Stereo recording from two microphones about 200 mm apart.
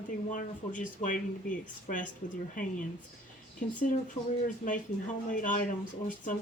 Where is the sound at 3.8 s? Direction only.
40° left (ahead or behind).